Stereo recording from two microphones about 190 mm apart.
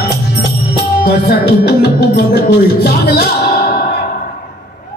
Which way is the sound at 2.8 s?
55° left (ahead or behind).